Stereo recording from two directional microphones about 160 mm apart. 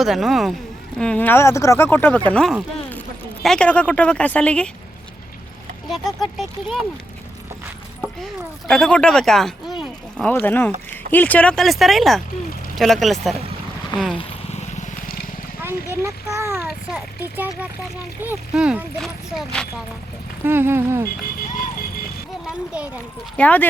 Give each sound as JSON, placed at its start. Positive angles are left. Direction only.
{"t": 0.0, "sound": "speech", "side_deg": 0}
{"t": 5.9, "sound": "speech", "side_deg": 0}
{"t": 8.0, "sound": "speech", "side_deg": 0}
{"t": 10.3, "sound": "speech", "side_deg": 10}
{"t": 14.2, "sound": "a sound", "side_deg": 45}
{"t": 15.9, "sound": "a child's voice", "side_deg": -20}
{"t": 20.4, "sound": "speech", "side_deg": -15}
{"t": 23.4, "sound": "speech", "side_deg": 10}